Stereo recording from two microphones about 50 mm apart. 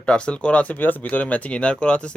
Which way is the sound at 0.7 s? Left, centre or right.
Left.